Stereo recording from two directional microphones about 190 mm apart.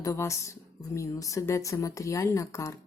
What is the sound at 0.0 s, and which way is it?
A woman's voice, 15° left (ahead or behind).